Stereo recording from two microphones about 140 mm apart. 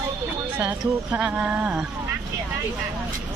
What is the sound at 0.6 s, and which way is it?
Speech, 10° right (ahead or behind).